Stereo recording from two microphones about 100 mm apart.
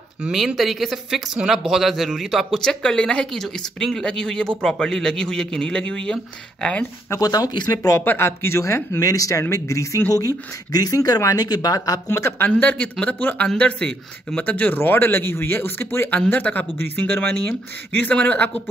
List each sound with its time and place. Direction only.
0.2 s speech: 5° right (ahead or behind)
7.2 s speech: 40° left (ahead or behind)
8.0 s a man's voice: 20° left (ahead or behind)
12.1 s a man's voice: 25° left (ahead or behind)